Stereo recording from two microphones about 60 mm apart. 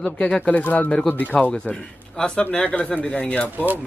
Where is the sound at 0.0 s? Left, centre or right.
Left.